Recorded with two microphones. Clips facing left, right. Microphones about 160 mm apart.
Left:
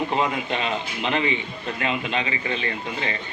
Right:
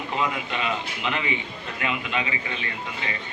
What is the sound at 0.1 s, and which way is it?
A man's voice, 30° left (ahead or behind).